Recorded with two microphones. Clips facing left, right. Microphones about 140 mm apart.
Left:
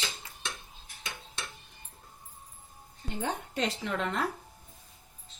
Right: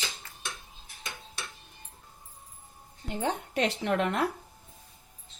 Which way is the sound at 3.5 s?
60° right (ahead or behind).